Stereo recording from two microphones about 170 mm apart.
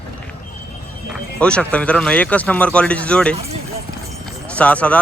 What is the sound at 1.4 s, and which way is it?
Speech, 5° left (ahead or behind).